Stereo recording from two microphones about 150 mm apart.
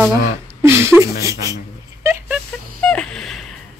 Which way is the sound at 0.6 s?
20° right (ahead or behind).